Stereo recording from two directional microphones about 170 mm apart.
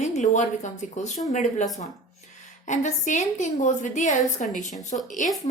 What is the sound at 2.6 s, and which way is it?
A woman's voice, 45° left (ahead or behind).